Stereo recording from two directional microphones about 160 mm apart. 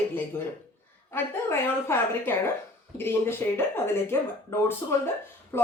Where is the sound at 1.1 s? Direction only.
15° left (ahead or behind).